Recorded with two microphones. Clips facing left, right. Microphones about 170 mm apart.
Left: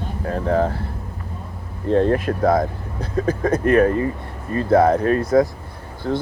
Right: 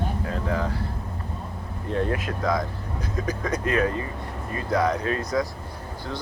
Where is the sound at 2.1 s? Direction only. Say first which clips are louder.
Left 8 dB; 50° left (ahead or behind).